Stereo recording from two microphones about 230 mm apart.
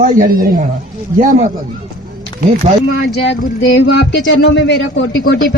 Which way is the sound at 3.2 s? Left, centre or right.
Left.